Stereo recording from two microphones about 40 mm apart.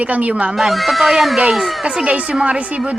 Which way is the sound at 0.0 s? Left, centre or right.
Right.